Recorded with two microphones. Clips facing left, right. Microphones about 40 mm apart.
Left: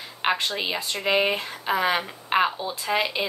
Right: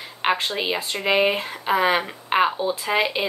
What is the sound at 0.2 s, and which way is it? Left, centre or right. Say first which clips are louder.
Speech: right 2 dB; centre.